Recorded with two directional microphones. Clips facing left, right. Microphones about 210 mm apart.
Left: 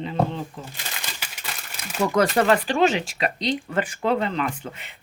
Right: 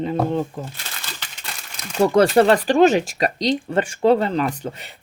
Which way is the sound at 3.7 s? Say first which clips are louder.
Right 9 dB; 25° right (ahead or behind).